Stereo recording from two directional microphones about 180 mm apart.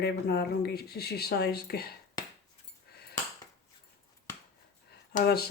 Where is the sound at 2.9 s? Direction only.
60° left (ahead or behind).